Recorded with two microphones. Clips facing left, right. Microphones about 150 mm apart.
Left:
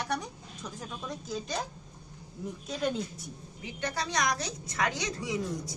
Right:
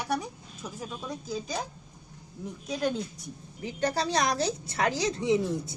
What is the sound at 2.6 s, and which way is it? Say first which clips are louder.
Speech: right 2 dB; centre (ahead or behind).